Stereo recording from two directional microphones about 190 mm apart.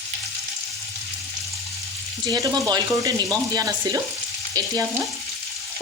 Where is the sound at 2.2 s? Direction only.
20° right (ahead or behind).